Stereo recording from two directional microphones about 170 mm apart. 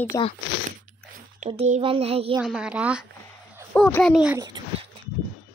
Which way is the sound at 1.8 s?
35° right (ahead or behind).